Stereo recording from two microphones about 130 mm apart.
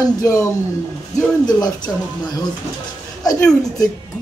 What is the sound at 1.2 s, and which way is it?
Speech, 30° left (ahead or behind).